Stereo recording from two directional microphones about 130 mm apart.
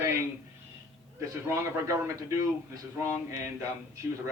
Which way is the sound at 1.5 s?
20° right (ahead or behind).